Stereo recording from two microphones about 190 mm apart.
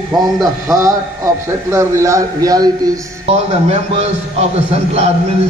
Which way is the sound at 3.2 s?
35° right (ahead or behind).